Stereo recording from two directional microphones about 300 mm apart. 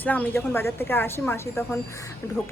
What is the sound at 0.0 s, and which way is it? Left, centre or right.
A woman's voice, centre.